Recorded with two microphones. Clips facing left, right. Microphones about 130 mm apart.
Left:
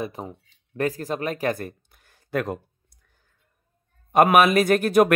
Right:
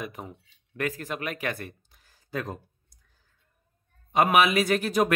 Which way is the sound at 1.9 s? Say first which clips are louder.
Left 7 dB; 60° left (ahead or behind).